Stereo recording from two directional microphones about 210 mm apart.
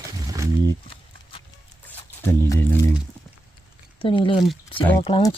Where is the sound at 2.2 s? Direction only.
10° left (ahead or behind).